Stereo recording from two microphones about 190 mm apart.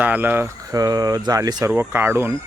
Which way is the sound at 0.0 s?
10° right (ahead or behind).